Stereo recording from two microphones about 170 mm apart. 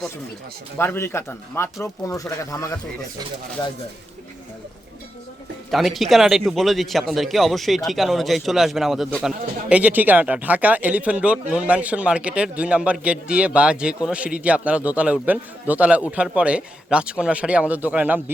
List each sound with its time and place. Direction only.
0.8 s speech: 15° left (ahead or behind)
5.7 s a man's voice: centre (ahead or behind)